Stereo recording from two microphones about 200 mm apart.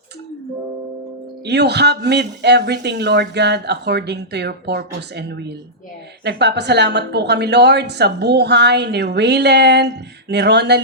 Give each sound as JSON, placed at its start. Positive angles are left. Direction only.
{"t": 1.5, "sound": "a woman's voice", "side_deg": -55}